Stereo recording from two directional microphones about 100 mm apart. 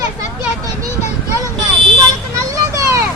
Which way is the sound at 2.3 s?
30° right (ahead or behind).